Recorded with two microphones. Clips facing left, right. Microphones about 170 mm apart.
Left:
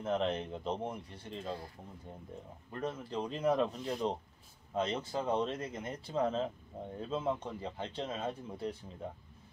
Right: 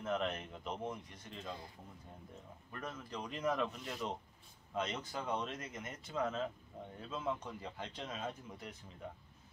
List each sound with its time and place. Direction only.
0.0 s speech: 25° left (ahead or behind)
2.7 s speech: 25° left (ahead or behind)